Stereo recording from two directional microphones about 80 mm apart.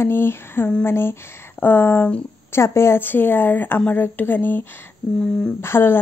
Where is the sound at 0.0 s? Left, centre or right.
Left.